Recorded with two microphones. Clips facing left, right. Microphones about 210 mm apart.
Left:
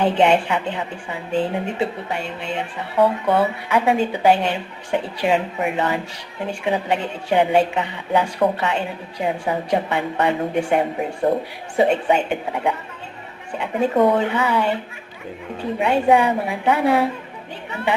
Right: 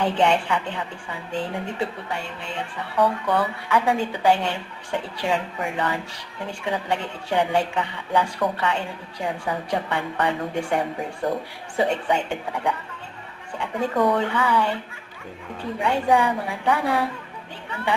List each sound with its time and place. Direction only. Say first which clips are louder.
0.0 s a woman's voice: left 4 dB; 20° left (ahead or behind)
15.8 s a woman's voice: left 4 dB; 20° left (ahead or behind)